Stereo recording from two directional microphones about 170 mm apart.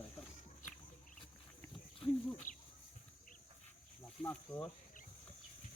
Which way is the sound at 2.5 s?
50° left (ahead or behind).